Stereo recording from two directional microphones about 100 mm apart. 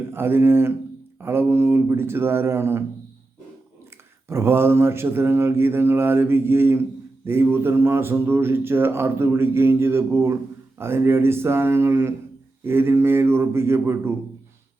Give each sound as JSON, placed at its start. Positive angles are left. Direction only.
{"t": 0.0, "sound": "speech", "side_deg": -20}
{"t": 4.3, "sound": "speech", "side_deg": -25}